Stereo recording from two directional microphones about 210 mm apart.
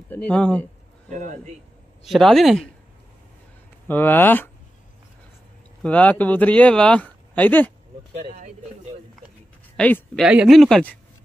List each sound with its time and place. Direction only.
0.1 s speech: 5° left (ahead or behind)
1.1 s a man's voice: 35° right (ahead or behind)
2.0 s speech: centre (ahead or behind)
3.8 s speech: 10° left (ahead or behind)
5.8 s speech: 5° left (ahead or behind)
9.8 s speech: 5° left (ahead or behind)